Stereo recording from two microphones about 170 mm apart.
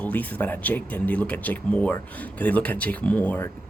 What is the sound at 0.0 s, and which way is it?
Speech, 10° left (ahead or behind).